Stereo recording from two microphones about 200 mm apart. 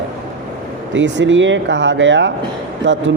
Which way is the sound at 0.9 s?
65° right (ahead or behind).